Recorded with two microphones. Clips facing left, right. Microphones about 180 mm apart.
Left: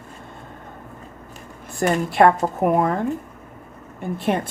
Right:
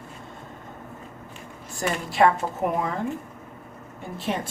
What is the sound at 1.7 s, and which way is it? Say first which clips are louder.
A woman's voice: left 5 dB; 55° left (ahead or behind).